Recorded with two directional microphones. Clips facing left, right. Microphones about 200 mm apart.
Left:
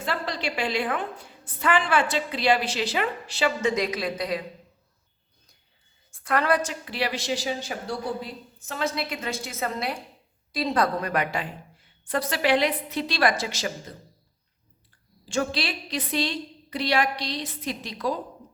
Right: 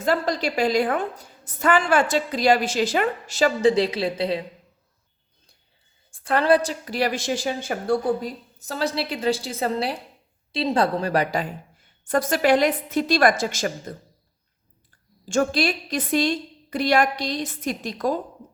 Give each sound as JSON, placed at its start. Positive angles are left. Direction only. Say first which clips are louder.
{"t": 0.0, "sound": "a woman's voice", "louder": "right 7 dB", "side_deg": -45}
{"t": 6.1, "sound": "a woman's voice", "louder": "right 5 dB", "side_deg": -30}
{"t": 12.0, "sound": "a woman's voice", "louder": "right 5 dB", "side_deg": -45}
{"t": 15.3, "sound": "a woman's voice", "louder": "right 6 dB", "side_deg": -45}